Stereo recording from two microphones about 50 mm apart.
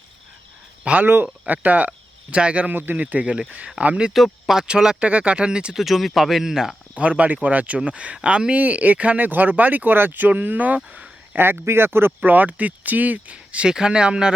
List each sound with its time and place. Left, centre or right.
1.0 s speech: right
2.6 s speech: right
4.1 s speech: centre
4.6 s speech: centre
5.7 s speech: centre
6.9 s speech: right
11.3 s speech: right
12.3 s speech: right; by 14.3 s centre